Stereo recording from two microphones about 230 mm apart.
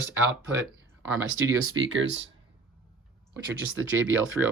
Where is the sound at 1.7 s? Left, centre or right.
Right.